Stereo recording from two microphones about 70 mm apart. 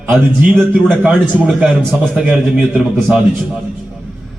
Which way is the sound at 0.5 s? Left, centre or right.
Right.